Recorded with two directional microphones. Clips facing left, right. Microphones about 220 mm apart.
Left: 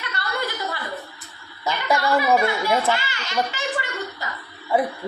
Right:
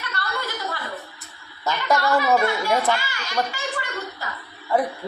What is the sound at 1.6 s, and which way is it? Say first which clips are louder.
Speech: even; 15° left (ahead or behind).